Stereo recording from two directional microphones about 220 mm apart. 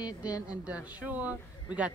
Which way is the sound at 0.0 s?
15° left (ahead or behind).